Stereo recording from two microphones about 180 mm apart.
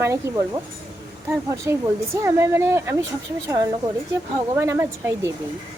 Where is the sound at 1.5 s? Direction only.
15° right (ahead or behind).